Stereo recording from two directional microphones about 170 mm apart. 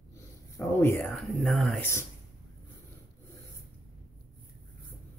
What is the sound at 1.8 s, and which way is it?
Speech, 15° left (ahead or behind).